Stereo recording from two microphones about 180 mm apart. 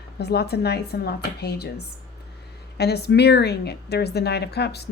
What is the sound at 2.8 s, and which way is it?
A woman's voice, 65° left (ahead or behind).